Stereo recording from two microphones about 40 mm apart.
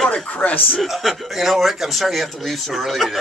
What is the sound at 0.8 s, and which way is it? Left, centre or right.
Speech, centre.